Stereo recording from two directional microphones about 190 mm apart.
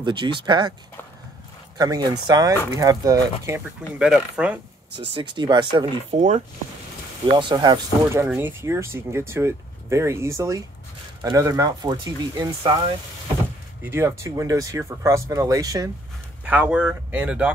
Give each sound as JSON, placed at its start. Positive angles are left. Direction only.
{"t": 0.0, "sound": "speech", "side_deg": -25}
{"t": 1.8, "sound": "speech", "side_deg": -20}
{"t": 5.1, "sound": "speech", "side_deg": -25}
{"t": 6.1, "sound": "speech", "side_deg": -40}
{"t": 7.2, "sound": "speech", "side_deg": -25}
{"t": 13.8, "sound": "speech", "side_deg": -10}
{"t": 16.4, "sound": "speech", "side_deg": -10}